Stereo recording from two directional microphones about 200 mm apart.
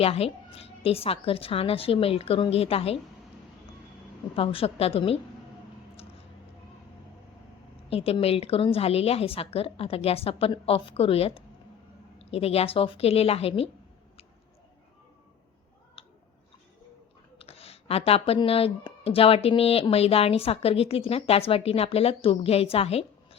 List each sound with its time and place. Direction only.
0.0 s speech: 30° left (ahead or behind)
4.4 s speech: 30° left (ahead or behind)
7.9 s speech: 30° left (ahead or behind)
17.3 s speech: 30° left (ahead or behind)